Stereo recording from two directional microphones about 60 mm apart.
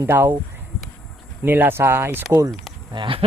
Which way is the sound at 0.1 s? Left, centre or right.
Right.